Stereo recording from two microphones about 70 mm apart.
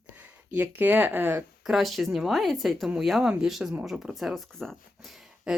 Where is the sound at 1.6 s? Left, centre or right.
Centre.